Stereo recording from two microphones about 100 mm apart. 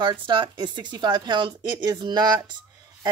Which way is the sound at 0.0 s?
50° right (ahead or behind).